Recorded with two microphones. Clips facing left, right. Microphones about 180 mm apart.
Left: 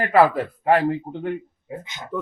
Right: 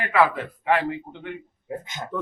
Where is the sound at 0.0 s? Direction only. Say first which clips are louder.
Left 4 dB; 40° left (ahead or behind).